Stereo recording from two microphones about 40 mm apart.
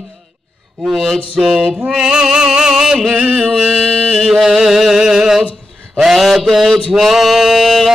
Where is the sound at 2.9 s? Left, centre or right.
Centre.